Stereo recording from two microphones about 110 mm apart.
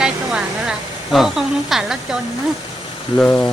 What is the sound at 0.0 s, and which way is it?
A woman's voice, 5° right (ahead or behind).